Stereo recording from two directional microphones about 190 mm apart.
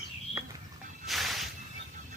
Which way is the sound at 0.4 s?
15° right (ahead or behind).